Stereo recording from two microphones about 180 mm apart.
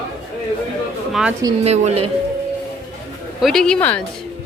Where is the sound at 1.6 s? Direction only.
35° right (ahead or behind).